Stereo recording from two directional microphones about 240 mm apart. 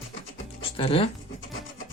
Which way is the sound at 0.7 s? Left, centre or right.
Left.